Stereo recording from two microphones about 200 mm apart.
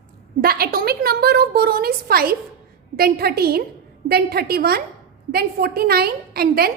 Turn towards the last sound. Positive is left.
turn(degrees=-50)  # may be behind; listen again after turning